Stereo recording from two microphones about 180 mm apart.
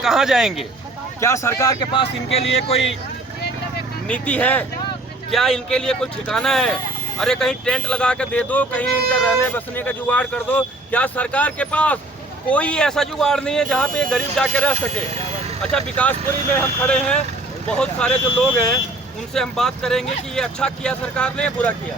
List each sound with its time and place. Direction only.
0.0 s speech: 5° right (ahead or behind)
1.2 s speech: 15° left (ahead or behind)
1.8 s speech: 30° left (ahead or behind)
4.1 s speech: 10° left (ahead or behind)